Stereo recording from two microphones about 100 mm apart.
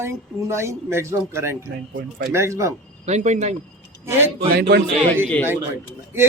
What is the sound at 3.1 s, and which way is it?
Speech, 90° right.